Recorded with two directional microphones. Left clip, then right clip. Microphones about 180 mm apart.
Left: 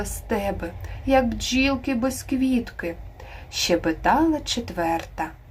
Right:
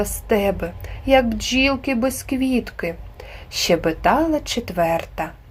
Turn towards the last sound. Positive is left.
turn(degrees=-35)  # may be behind; listen again after turning